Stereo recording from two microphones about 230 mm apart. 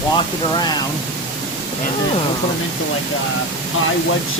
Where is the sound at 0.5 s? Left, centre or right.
Centre.